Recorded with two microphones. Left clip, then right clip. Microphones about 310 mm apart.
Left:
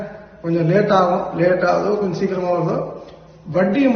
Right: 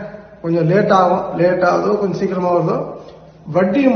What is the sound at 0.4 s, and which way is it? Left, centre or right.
A man's voice, centre.